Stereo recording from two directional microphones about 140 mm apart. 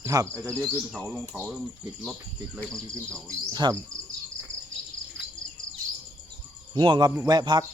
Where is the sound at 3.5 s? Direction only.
30° right (ahead or behind).